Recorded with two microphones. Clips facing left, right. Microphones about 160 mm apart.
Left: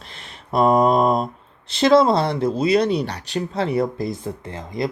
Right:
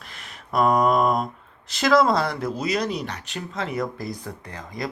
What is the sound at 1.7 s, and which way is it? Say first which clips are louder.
Speech: left 4 dB; 30° left (ahead or behind).